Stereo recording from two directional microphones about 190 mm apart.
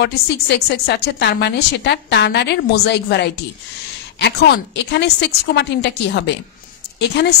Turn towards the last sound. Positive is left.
turn(degrees=60)  # may be behind; listen again after turning